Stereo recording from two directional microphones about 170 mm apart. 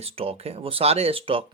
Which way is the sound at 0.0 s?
35° right (ahead or behind).